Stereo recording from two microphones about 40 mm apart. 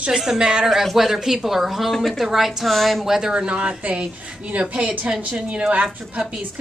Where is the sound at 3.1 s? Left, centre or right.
Centre.